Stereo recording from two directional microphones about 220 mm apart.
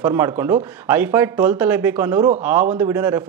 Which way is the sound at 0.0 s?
10° right (ahead or behind).